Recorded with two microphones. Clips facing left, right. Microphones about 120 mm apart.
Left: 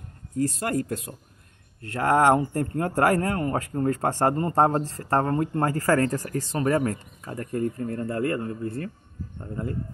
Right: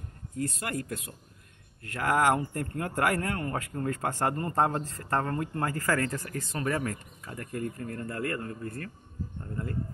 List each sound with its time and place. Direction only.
0.4 s speech: 35° left (ahead or behind)